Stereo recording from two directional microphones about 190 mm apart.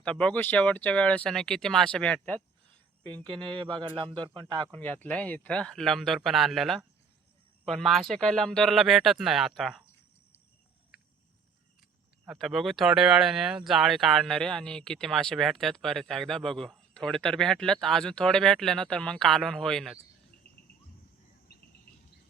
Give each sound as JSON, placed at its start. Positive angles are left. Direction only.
{"t": 0.0, "sound": "speech", "side_deg": 5}
{"t": 3.2, "sound": "speech", "side_deg": -25}
{"t": 4.7, "sound": "speech", "side_deg": 10}
{"t": 12.2, "sound": "speech", "side_deg": 0}